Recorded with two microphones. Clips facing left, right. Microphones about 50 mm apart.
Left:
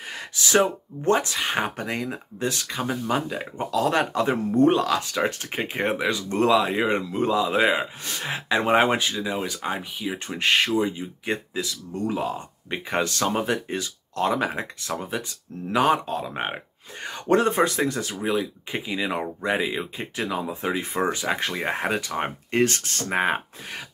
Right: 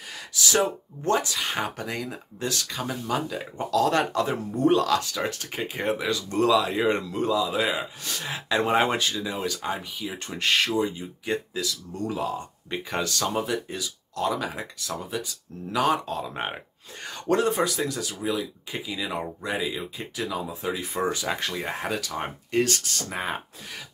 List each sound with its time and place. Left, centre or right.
0.1 s speech: left
6.8 s speech: centre
7.2 s speech: left
16.2 s speech: centre; by 23.8 s left